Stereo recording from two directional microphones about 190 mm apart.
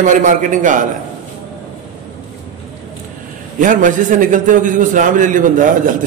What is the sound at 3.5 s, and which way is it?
A man's voice, 45° right (ahead or behind).